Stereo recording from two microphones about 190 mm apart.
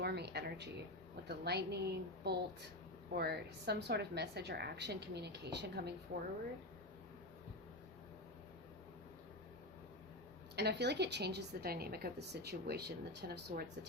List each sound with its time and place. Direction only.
0.0 s a woman's voice: 60° right (ahead or behind)
6.1 s speech: 45° right (ahead or behind)
10.5 s a woman's voice: 60° right (ahead or behind)